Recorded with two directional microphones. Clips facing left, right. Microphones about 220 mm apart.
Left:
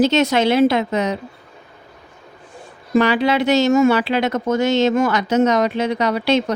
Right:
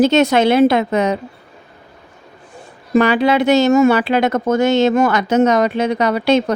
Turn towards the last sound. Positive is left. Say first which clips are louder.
# right 3 dB
turn(degrees=-50)  # may be behind; listen again after turning